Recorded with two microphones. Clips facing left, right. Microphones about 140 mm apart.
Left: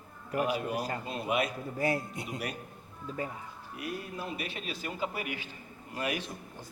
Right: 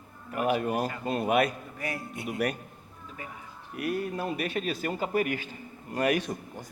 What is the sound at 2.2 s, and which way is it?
Speech, 55° right (ahead or behind).